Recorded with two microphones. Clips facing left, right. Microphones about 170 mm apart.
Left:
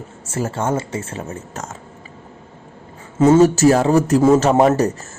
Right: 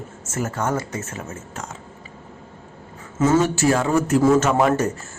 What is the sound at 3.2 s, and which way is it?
Speech, 30° left (ahead or behind).